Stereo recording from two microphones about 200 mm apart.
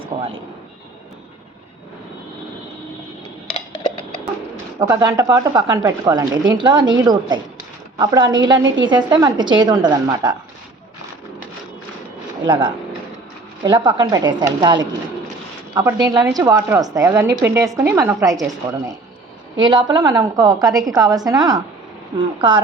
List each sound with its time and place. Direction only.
3.5 s a sound: 25° left (ahead or behind)
4.8 s speech: 20° right (ahead or behind)
12.5 s speech: 25° right (ahead or behind)
16.0 s a woman's voice: 20° right (ahead or behind)
19.5 s speech: 20° right (ahead or behind)